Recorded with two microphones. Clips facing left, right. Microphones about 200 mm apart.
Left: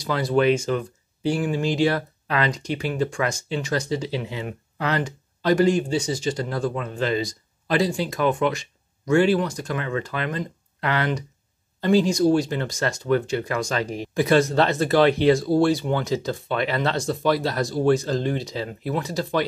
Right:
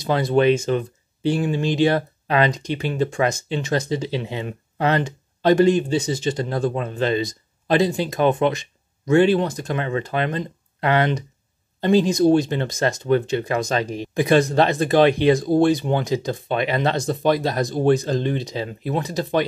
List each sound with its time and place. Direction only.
0.0 s speech: 25° right (ahead or behind)